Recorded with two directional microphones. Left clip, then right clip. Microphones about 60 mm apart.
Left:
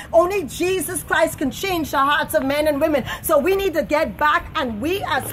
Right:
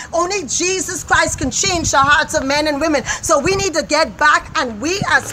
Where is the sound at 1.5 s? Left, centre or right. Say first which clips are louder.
Right 5 dB; right.